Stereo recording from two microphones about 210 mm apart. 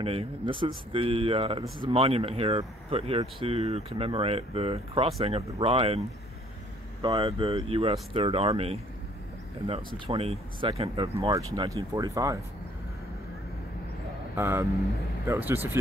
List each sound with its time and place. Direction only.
0.0 s speech: 30° right (ahead or behind)
10.0 s speech: 30° right (ahead or behind)
14.3 s speech: 10° right (ahead or behind)